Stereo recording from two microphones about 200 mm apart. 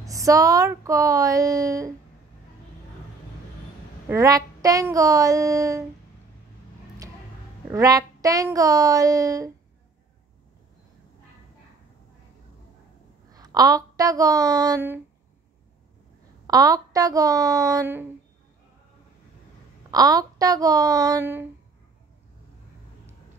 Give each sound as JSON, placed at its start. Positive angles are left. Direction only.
{"t": 0.0, "sound": "speech", "side_deg": -15}
{"t": 4.1, "sound": "speech", "side_deg": -15}
{"t": 7.7, "sound": "speech", "side_deg": -15}
{"t": 13.3, "sound": "a woman's voice", "side_deg": -20}
{"t": 16.4, "sound": "speech", "side_deg": -15}
{"t": 19.9, "sound": "speech", "side_deg": -15}